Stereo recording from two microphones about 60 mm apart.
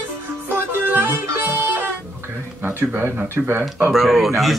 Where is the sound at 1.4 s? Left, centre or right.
Right.